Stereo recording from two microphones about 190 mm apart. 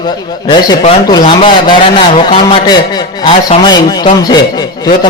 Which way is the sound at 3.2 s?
25° left (ahead or behind).